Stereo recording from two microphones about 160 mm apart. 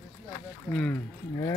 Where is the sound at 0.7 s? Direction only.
10° left (ahead or behind).